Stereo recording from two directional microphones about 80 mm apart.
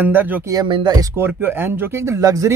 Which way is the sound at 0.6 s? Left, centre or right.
Right.